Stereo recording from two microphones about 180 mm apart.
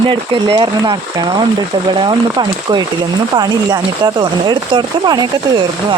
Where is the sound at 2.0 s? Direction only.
25° right (ahead or behind).